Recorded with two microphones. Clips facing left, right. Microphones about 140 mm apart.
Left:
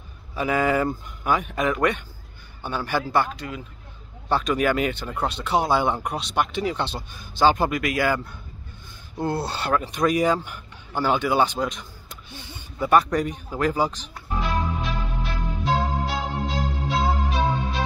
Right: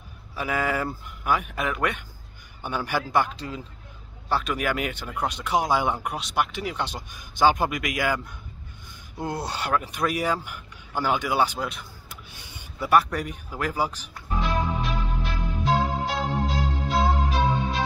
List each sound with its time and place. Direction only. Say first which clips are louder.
0.4 s speech: left 5 dB; 5° right (ahead or behind)
3.3 s speech: left 1 dB; 30° right (ahead or behind)
4.3 s speech: left 4 dB; 5° right (ahead or behind)
9.2 s speech: left 4 dB; 15° right (ahead or behind)
11.6 s a sound: left 4 dB; 10° right (ahead or behind)
12.8 s speech: left 2 dB; 10° right (ahead or behind)
14.4 s music: even; centre (ahead or behind)